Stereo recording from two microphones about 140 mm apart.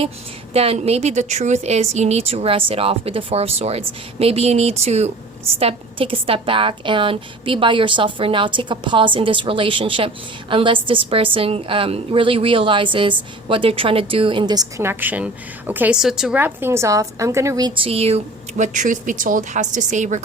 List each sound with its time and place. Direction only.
0.5 s a woman's voice: 45° right (ahead or behind); by 17.7 s 20° right (ahead or behind)
17.7 s a woman's voice: 45° right (ahead or behind); by 20.2 s 60° right (ahead or behind)